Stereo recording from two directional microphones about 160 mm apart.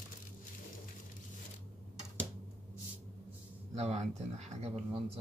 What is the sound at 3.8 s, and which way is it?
Speech, 40° right (ahead or behind).